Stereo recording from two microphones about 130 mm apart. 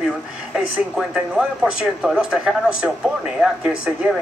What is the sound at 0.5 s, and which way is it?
Speech, 5° right (ahead or behind).